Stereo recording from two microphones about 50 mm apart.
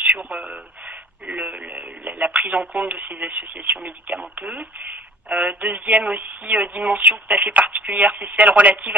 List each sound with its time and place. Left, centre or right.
0.0 s a sound: right
1.4 s radio: right
2.5 s speech: right